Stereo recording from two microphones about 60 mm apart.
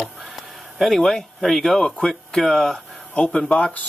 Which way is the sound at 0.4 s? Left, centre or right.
Centre.